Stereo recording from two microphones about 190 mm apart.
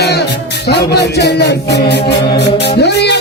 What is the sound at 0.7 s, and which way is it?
A capella, 60° left (ahead or behind).